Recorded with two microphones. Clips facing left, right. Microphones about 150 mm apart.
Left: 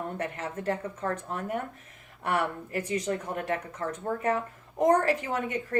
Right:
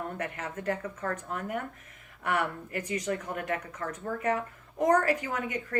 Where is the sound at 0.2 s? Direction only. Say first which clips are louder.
Left 2 dB; 30° left (ahead or behind).